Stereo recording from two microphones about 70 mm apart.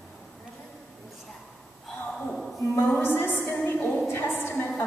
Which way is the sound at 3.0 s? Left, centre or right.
Left.